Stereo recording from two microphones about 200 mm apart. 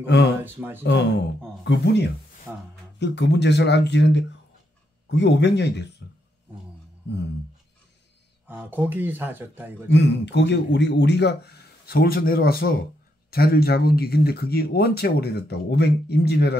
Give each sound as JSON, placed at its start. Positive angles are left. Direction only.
{"t": 0.0, "sound": "speech", "side_deg": 60}
{"t": 0.4, "sound": "speech", "side_deg": -10}
{"t": 1.6, "sound": "speech", "side_deg": 60}
{"t": 2.5, "sound": "speech", "side_deg": -10}
{"t": 3.0, "sound": "speech", "side_deg": 60}
{"t": 8.5, "sound": "speech", "side_deg": -10}
{"t": 9.8, "sound": "speech", "side_deg": 60}